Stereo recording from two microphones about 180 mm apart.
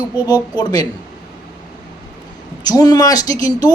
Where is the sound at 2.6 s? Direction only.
20° left (ahead or behind).